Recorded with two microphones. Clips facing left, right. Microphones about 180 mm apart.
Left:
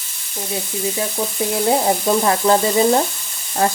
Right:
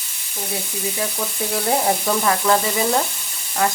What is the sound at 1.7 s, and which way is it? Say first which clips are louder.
Speech: left 2 dB; 25° left (ahead or behind).